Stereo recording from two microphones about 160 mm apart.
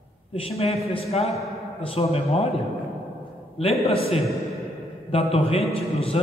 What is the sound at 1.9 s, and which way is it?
Speech, 40° left (ahead or behind).